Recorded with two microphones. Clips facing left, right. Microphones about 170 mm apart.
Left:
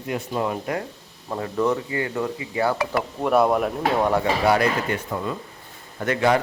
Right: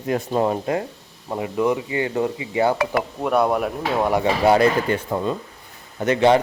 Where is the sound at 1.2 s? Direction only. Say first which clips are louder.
Right 2 dB; 15° right (ahead or behind).